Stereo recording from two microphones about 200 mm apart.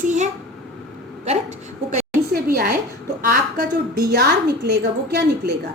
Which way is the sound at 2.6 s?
45° right (ahead or behind).